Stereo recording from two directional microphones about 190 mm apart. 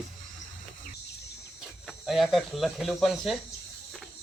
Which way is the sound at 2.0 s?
Centre (ahead or behind).